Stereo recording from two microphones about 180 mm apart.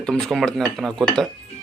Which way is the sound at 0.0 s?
5° left (ahead or behind).